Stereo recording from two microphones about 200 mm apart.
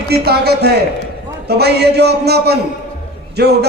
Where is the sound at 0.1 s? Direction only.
55° right (ahead or behind).